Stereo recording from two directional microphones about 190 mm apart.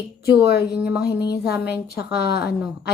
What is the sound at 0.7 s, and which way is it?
Speech, 5° right (ahead or behind).